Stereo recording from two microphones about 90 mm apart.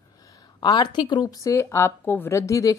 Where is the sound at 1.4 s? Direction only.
30° left (ahead or behind).